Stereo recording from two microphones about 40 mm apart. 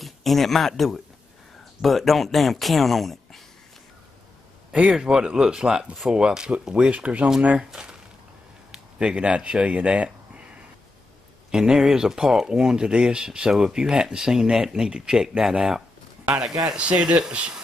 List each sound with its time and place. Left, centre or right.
0.0 s speech: centre
4.9 s speech: centre
6.9 s speech: right
8.7 s speech: right
11.5 s speech: centre
17.3 s speech: right